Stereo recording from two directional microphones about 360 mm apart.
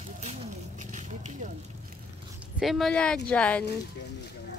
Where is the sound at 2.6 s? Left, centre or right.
Centre.